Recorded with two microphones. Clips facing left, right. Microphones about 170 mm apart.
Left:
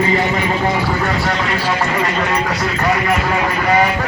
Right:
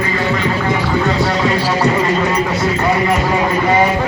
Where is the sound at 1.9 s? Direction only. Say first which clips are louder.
Right 3 dB; 25° right (ahead or behind).